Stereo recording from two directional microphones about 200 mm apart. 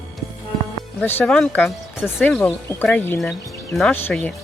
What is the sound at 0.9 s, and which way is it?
Speech, 10° left (ahead or behind).